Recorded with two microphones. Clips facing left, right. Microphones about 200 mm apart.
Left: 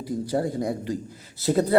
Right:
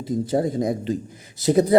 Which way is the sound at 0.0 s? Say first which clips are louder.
Right 4 dB; 20° right (ahead or behind).